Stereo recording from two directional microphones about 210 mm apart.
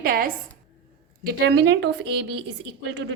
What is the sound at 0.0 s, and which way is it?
A woman's voice, 45° right (ahead or behind).